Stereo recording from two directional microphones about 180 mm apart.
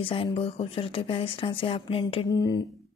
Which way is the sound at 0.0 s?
30° left (ahead or behind).